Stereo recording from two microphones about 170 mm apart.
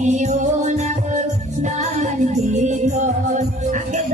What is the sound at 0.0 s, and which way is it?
Music, 40° right (ahead or behind).